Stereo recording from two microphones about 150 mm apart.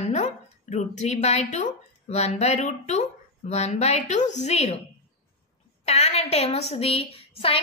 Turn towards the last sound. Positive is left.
turn(degrees=40)  # may be behind; listen again after turning